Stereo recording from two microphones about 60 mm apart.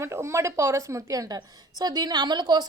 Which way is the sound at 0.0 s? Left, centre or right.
Right.